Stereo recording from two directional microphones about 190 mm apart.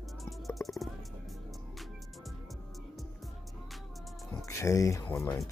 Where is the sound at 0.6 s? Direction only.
Centre (ahead or behind).